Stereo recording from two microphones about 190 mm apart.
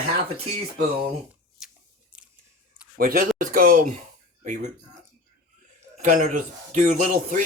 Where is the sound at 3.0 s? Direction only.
50° right (ahead or behind).